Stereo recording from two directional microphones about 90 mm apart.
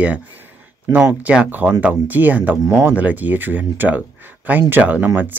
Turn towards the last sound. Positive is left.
turn(degrees=-20)  # may be behind; listen again after turning